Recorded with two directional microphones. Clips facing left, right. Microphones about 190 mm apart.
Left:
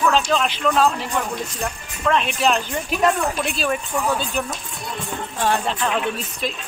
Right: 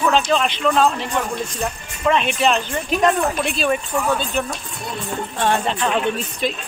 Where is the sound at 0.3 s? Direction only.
5° left (ahead or behind).